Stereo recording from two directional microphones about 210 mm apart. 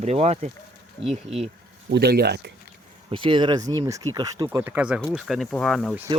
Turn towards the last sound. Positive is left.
turn(degrees=0)  # may be behind; listen again after turning